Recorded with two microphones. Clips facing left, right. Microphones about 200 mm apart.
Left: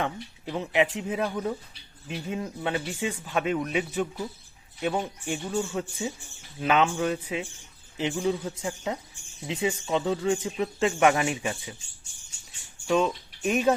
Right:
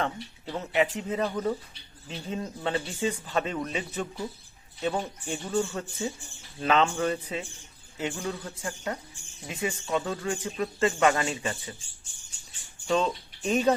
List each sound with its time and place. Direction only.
0.0 s speech: 10° left (ahead or behind)
7.9 s speech: 20° left (ahead or behind)
12.9 s speech: 10° left (ahead or behind)